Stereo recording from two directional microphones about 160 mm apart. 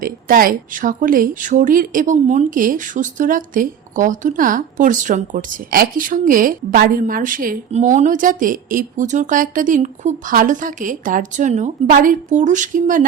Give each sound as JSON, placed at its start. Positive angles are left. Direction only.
{"t": 0.0, "sound": "speech", "side_deg": -60}
{"t": 7.7, "sound": "a woman's voice", "side_deg": -50}